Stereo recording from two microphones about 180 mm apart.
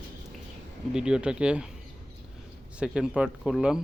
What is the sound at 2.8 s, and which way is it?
Speech, 5° right (ahead or behind).